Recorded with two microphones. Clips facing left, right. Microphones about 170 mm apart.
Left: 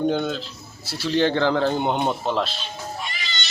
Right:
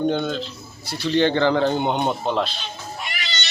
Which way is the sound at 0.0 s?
5° left (ahead or behind).